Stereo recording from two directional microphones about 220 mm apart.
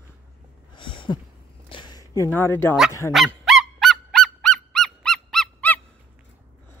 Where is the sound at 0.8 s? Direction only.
20° left (ahead or behind).